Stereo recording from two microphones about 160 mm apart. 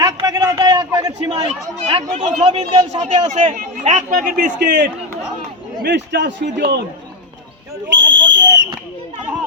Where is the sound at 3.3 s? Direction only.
50° right (ahead or behind).